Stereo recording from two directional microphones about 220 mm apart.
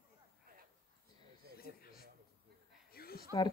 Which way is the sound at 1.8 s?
45° left (ahead or behind).